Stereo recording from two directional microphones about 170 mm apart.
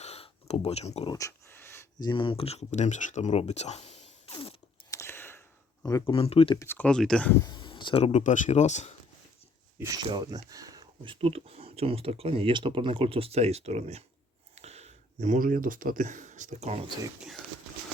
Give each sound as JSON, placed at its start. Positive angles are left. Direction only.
{"t": 0.0, "sound": "a sound", "side_deg": 40}
{"t": 1.1, "sound": "speech", "side_deg": 15}
{"t": 4.9, "sound": "a sound", "side_deg": 15}
{"t": 5.8, "sound": "speech", "side_deg": 20}
{"t": 6.1, "sound": "speech", "side_deg": 35}
{"t": 6.6, "sound": "speech", "side_deg": 10}
{"t": 7.4, "sound": "speech", "side_deg": 30}
{"t": 8.2, "sound": "speech", "side_deg": 45}
{"t": 9.7, "sound": "speech", "side_deg": -20}